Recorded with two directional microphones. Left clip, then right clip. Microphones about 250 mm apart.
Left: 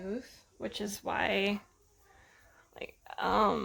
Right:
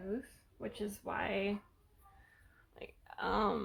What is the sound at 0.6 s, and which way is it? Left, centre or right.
Speech, left.